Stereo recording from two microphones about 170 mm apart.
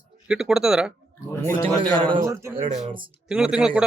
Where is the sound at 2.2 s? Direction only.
15° right (ahead or behind).